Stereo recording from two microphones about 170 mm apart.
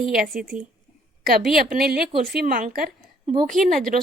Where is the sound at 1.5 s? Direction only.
65° right (ahead or behind).